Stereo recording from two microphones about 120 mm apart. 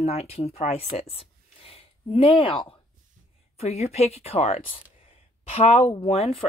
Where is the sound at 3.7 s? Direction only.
60° left (ahead or behind).